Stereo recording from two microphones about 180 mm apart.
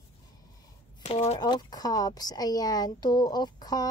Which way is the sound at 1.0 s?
30° left (ahead or behind).